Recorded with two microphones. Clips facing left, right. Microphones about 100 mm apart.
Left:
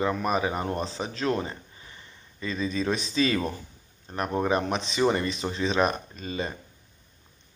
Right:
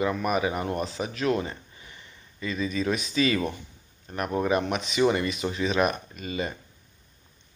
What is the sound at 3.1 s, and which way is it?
Speech, 35° left (ahead or behind).